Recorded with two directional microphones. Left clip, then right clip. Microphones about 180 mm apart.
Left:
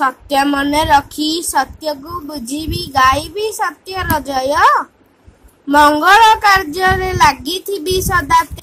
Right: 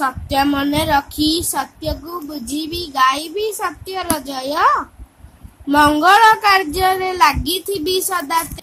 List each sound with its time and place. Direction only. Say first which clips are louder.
0.0 s a woman's voice: left 3 dB; 25° left (ahead or behind)